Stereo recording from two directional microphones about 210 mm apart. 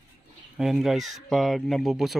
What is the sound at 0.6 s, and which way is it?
Speech, centre (ahead or behind).